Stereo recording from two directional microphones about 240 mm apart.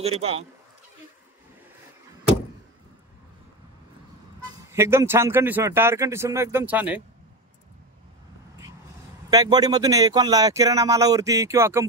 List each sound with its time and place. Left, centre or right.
0.0 s speech: right
4.6 s speech: centre
9.3 s speech: centre